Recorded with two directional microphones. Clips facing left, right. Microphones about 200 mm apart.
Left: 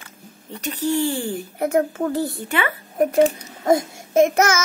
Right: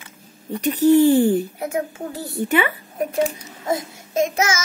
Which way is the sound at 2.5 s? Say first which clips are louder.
Right 7 dB; 15° right (ahead or behind).